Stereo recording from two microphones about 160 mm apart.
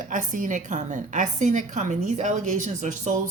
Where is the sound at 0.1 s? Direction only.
55° right (ahead or behind).